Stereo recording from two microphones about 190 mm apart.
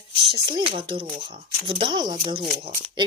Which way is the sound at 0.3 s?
25° right (ahead or behind).